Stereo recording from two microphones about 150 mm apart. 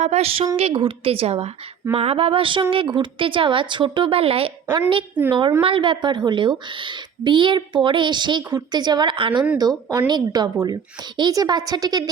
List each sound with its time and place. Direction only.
0.0 s a woman's voice: 45° right (ahead or behind); by 12.1 s 25° right (ahead or behind)